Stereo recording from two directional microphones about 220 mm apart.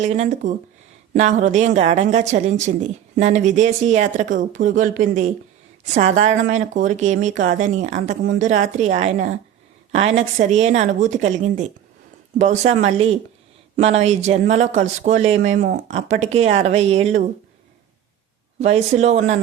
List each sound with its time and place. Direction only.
0.0 s speech: 30° right (ahead or behind)
18.6 s speech: 30° right (ahead or behind)